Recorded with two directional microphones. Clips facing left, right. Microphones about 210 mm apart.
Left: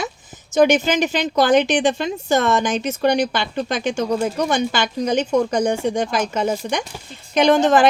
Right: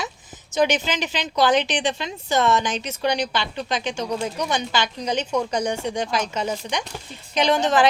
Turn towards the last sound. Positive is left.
turn(degrees=50)  # may be behind; listen again after turning